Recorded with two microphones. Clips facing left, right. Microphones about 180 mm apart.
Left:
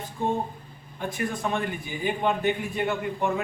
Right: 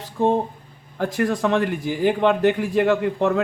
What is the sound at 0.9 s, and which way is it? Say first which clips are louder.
A man's voice: right 8 dB; 90° right.